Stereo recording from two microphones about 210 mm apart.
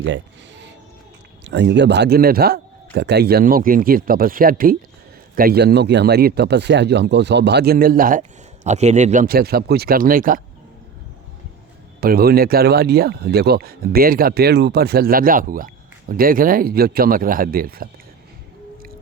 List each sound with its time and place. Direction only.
1.5 s speech: 55° right (ahead or behind)
11.9 s speech: 45° right (ahead or behind)